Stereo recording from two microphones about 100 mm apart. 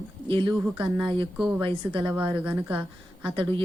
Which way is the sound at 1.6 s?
55° right (ahead or behind).